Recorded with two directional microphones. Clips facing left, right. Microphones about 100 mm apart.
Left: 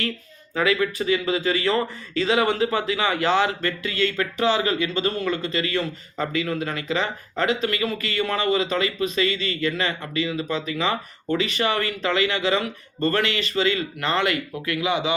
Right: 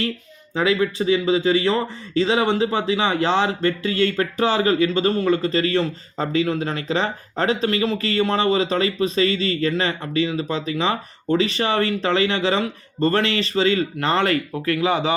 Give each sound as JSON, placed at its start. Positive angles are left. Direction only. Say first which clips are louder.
{"t": 0.5, "sound": "a man's voice", "louder": "right 2 dB", "side_deg": -25}